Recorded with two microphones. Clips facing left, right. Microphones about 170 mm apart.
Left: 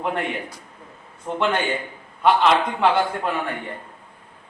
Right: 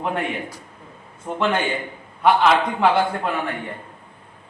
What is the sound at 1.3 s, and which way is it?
Speech, centre (ahead or behind).